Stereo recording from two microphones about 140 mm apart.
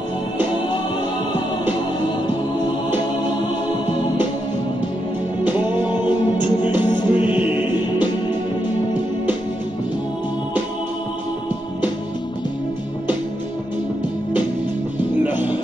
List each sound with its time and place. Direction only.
1.7 s music: 30° left (ahead or behind)
5.5 s music: 30° left (ahead or behind)